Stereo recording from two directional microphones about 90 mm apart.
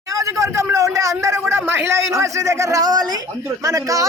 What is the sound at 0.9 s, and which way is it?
A man's voice, 35° right (ahead or behind).